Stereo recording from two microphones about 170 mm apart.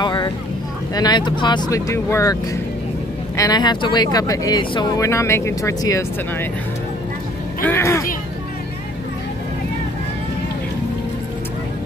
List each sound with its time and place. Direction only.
0.0 s boat: 25° left (ahead or behind)
0.9 s speech: 25° left (ahead or behind)
7.6 s speech: 15° left (ahead or behind)